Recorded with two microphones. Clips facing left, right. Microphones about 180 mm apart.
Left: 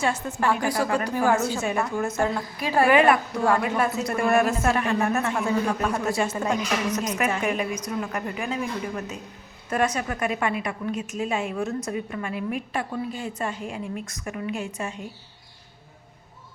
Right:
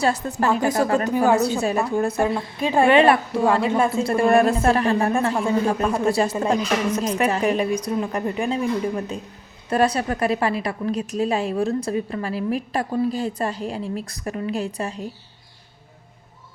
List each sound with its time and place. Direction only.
0.0 s a woman's voice: 35° right (ahead or behind)
0.4 s a woman's voice: 20° right (ahead or behind)
1.5 s a woman's voice: 35° right (ahead or behind)
2.4 s a woman's voice: 25° right (ahead or behind)